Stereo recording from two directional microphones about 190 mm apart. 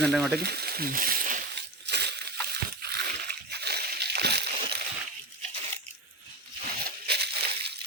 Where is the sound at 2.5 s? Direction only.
55° right (ahead or behind).